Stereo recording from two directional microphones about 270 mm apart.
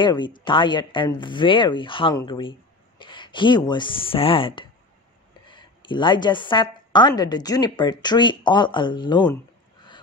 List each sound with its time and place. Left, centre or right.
0.0 s a woman's voice: centre